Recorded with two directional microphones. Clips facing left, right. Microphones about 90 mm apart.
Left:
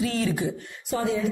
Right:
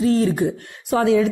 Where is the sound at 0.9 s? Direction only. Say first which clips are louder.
Right 9 dB; 85° right.